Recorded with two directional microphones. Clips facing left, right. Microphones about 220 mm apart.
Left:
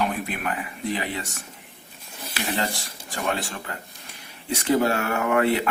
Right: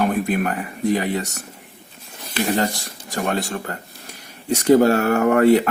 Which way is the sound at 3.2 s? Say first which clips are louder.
Right 4 dB; 45° right (ahead or behind).